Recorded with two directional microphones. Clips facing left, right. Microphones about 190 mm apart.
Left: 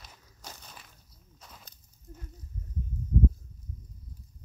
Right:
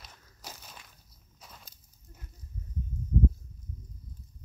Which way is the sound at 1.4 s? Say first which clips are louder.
Even; centre (ahead or behind).